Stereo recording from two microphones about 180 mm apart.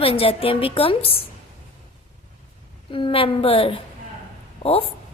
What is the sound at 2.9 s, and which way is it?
A woman's voice, 30° left (ahead or behind).